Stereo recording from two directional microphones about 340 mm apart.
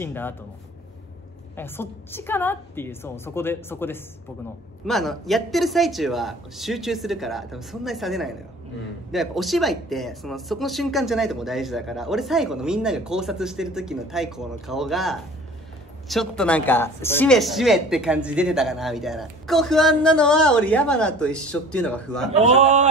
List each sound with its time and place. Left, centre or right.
0.0 s a woman's voice: centre
1.6 s a woman's voice: centre
22.3 s speech: centre